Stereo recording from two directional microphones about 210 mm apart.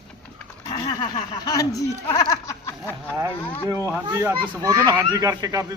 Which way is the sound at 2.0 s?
15° left (ahead or behind).